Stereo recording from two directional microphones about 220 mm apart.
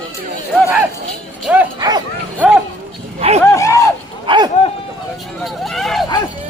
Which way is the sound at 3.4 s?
15° left (ahead or behind).